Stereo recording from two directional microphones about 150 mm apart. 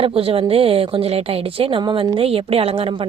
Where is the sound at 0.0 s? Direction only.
40° right (ahead or behind).